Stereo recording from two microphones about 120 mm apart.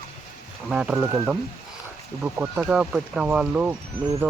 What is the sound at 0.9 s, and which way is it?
Speech, 25° right (ahead or behind).